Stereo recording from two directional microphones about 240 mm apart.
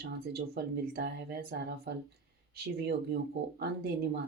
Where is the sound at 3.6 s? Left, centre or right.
Right.